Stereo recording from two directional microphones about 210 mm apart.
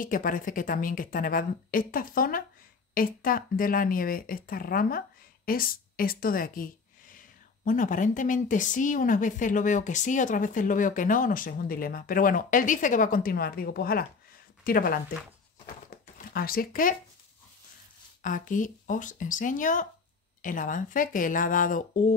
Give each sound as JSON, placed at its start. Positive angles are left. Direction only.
{"t": 0.0, "sound": "speech", "side_deg": 40}
{"t": 15.6, "sound": "a sound", "side_deg": 45}
{"t": 18.2, "sound": "speech", "side_deg": 40}